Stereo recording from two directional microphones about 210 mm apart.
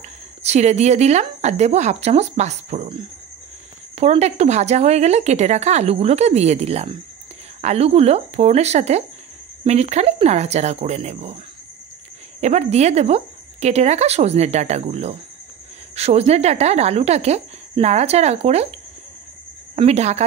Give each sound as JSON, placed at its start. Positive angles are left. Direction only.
{"t": 0.4, "sound": "a woman's voice", "side_deg": -30}
{"t": 3.9, "sound": "a woman's voice", "side_deg": -30}
{"t": 12.4, "sound": "a woman's voice", "side_deg": -30}